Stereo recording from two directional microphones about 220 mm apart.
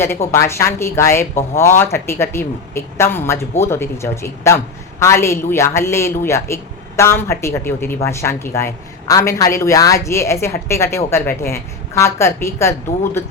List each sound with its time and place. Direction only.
0.0 s a woman's voice: 10° left (ahead or behind)